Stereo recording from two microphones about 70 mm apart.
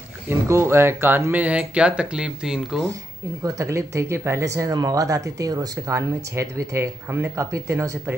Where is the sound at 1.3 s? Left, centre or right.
Centre.